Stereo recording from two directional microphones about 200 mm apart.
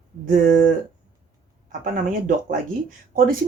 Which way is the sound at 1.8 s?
40° right (ahead or behind).